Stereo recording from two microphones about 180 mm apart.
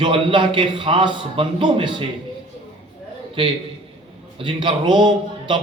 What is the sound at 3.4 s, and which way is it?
A man's voice, 30° right (ahead or behind).